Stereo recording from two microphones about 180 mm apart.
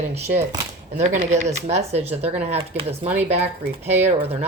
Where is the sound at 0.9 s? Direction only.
40° right (ahead or behind).